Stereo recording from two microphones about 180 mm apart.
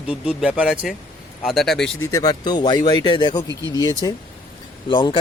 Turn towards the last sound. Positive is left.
turn(degrees=25)  # may be behind; listen again after turning